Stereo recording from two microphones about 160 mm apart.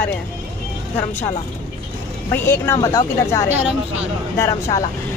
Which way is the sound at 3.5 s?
10° right (ahead or behind).